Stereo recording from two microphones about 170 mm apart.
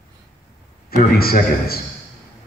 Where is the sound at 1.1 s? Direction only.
60° left (ahead or behind).